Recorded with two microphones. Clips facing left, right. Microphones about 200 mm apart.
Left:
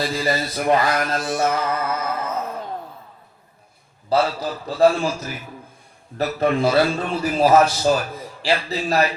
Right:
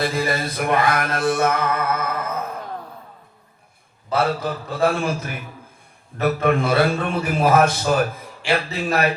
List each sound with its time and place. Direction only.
0.0 s mantra: 55° right (ahead or behind)
4.2 s mantra: 55° right (ahead or behind)